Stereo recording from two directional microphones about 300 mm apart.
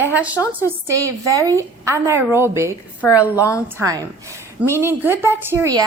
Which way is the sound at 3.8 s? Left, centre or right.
Centre.